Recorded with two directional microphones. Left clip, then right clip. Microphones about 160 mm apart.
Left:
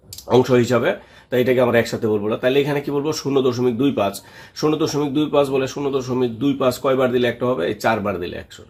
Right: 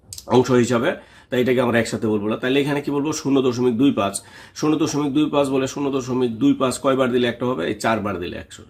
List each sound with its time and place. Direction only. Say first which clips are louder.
0.3 s speech: left 1 dB; 25° right (ahead or behind)